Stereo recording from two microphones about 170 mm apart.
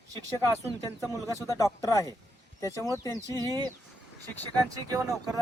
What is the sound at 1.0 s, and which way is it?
Speech, 20° left (ahead or behind).